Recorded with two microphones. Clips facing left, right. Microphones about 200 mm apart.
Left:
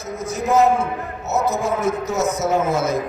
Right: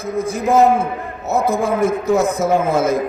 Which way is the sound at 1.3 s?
55° right (ahead or behind).